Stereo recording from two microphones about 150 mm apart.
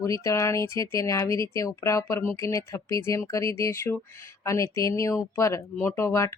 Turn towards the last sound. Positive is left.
turn(degrees=20)  # may be behind; listen again after turning